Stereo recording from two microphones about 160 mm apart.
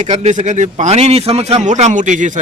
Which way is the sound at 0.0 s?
45° right (ahead or behind).